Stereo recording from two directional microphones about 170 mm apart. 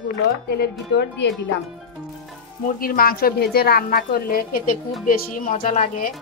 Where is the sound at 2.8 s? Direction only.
60° left (ahead or behind).